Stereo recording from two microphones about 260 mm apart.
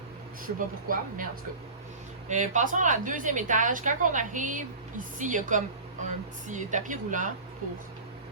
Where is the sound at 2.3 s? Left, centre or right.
Right.